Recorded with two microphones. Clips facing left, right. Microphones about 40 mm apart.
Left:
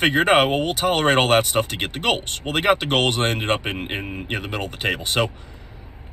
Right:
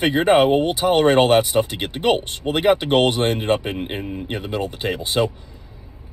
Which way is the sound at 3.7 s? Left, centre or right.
Left.